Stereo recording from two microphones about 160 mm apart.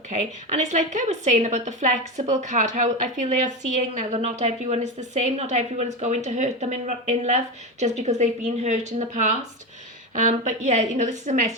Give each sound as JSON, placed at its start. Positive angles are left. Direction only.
{"t": 0.1, "sound": "a woman's voice", "side_deg": -50}